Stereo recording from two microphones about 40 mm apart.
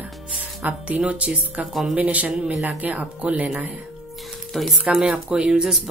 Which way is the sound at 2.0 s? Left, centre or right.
Right.